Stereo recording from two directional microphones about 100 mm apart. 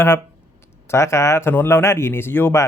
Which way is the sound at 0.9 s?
30° left (ahead or behind).